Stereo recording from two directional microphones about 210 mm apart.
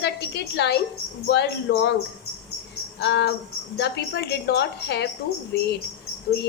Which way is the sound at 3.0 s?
55° left (ahead or behind).